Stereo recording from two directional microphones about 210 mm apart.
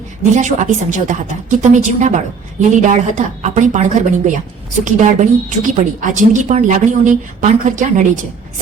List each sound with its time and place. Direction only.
0.3 s speech: 35° right (ahead or behind)